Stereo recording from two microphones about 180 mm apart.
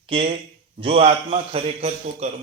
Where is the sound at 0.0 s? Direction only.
30° right (ahead or behind).